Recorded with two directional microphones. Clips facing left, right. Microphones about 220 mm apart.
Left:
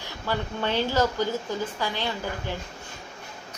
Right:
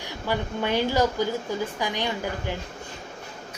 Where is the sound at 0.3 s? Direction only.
15° right (ahead or behind).